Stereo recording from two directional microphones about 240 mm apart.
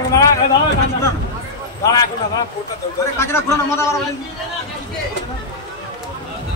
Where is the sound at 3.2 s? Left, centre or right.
Centre.